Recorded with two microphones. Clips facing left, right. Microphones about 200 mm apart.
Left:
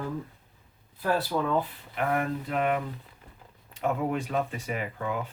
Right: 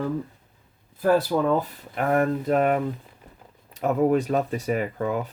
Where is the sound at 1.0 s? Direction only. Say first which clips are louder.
Right 7 dB; 45° right (ahead or behind).